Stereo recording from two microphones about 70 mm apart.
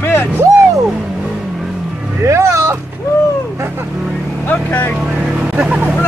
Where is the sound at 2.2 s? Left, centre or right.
Right.